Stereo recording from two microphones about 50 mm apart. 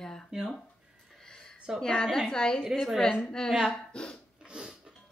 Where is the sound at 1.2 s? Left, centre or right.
Centre.